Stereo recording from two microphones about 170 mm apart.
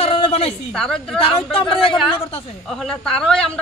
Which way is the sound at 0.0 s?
35° left (ahead or behind).